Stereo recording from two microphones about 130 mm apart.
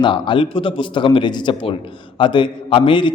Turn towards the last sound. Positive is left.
turn(degrees=40)  # may be behind; listen again after turning